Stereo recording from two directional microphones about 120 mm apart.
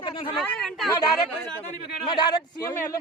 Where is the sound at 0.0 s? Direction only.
45° left (ahead or behind).